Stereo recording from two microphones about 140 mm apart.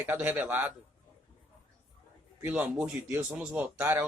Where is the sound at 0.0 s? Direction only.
15° right (ahead or behind).